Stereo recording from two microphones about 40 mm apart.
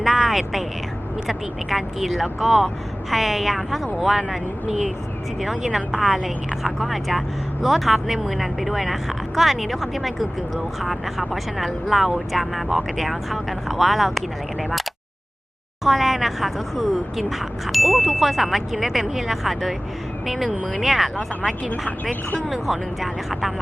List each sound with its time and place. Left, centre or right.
0.0 s a sound: centre
1.3 s speech: centre
5.4 s speech: centre
22.4 s speech: centre